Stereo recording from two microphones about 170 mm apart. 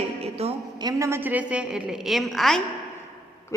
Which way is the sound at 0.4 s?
35° right (ahead or behind).